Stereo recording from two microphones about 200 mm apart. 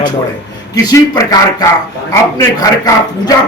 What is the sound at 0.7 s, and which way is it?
A man's voice, 15° left (ahead or behind).